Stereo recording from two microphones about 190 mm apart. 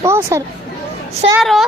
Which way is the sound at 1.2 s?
30° right (ahead or behind).